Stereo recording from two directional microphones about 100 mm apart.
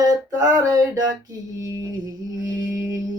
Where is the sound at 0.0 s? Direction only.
35° right (ahead or behind).